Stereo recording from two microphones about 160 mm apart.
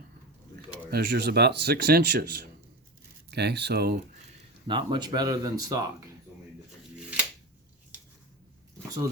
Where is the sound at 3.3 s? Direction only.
90° right.